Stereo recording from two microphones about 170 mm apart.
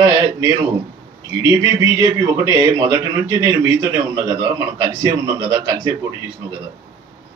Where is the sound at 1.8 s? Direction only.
15° right (ahead or behind).